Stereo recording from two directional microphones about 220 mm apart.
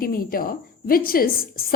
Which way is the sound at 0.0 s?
40° left (ahead or behind).